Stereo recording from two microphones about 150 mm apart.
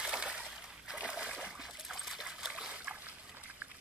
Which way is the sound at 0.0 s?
5° right (ahead or behind).